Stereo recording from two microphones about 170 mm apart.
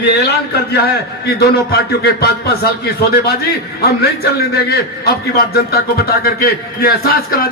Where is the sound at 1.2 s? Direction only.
65° left (ahead or behind).